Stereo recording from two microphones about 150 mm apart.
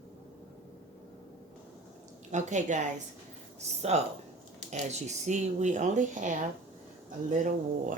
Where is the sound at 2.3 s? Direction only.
55° right (ahead or behind).